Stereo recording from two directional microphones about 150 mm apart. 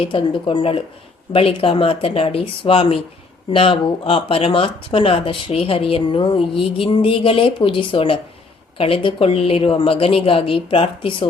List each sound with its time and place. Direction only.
0.0 s speech: 35° left (ahead or behind)